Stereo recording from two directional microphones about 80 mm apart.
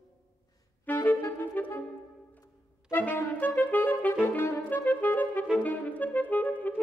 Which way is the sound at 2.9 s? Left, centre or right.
Left.